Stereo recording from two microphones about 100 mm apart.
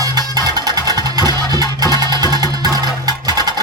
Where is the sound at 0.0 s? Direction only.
40° right (ahead or behind).